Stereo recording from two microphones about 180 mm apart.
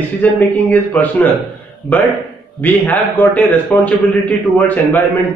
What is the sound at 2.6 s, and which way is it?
A man's voice, 10° left (ahead or behind).